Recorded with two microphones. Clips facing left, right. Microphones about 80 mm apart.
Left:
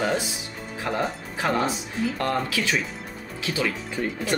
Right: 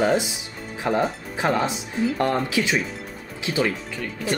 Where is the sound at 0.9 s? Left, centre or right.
Right.